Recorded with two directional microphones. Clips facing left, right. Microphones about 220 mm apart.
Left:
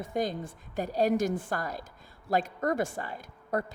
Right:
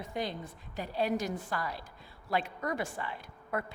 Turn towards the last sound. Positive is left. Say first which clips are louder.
# left 4 dB
turn(degrees=40)  # may be behind; listen again after turning